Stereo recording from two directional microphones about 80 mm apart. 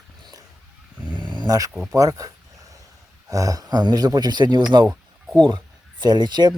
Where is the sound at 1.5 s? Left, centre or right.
Right.